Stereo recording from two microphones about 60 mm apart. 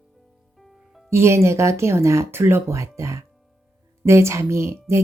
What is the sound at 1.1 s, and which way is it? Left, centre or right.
Speech, right.